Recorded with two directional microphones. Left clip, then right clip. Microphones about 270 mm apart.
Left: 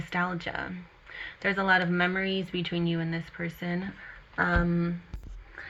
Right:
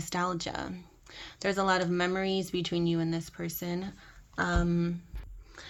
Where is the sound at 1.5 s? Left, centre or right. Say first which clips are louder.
Left 3 dB; right.